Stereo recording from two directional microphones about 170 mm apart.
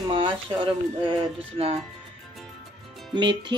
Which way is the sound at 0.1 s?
30° right (ahead or behind).